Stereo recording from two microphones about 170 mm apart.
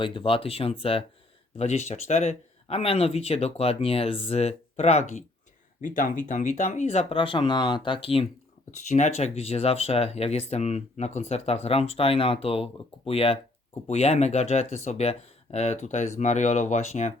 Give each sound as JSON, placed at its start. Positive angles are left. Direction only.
{"t": 0.0, "sound": "speech", "side_deg": 30}
{"t": 5.8, "sound": "speech", "side_deg": 50}